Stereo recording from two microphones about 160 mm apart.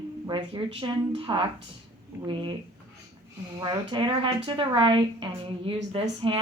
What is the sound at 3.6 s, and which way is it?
A woman's voice, 30° right (ahead or behind).